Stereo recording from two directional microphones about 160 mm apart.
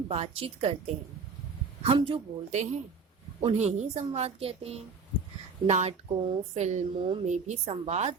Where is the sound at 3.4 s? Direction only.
45° right (ahead or behind).